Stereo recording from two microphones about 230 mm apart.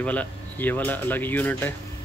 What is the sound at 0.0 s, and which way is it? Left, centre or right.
Speech, centre.